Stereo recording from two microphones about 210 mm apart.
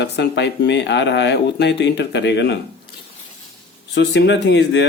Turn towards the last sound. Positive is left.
turn(degrees=55)  # may be behind; listen again after turning